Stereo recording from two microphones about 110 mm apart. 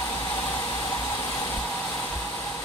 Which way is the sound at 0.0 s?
20° left (ahead or behind).